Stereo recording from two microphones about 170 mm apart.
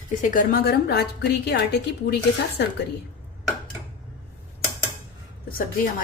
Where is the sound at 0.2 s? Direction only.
50° left (ahead or behind); by 2.1 s 75° left (ahead or behind).